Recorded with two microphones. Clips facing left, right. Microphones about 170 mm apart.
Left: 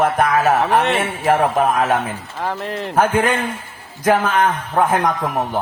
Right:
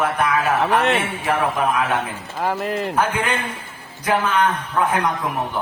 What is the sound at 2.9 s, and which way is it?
A man's voice, 45° left (ahead or behind).